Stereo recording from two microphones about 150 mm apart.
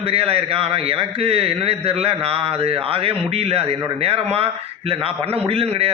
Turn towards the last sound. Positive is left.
turn(degrees=-40)  # may be behind; listen again after turning